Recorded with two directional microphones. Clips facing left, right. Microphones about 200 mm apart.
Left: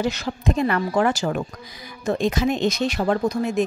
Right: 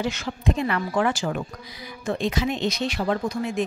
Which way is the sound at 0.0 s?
40° left (ahead or behind).